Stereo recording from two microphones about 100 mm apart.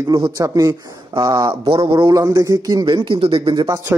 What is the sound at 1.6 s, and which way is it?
Speech, 65° right (ahead or behind).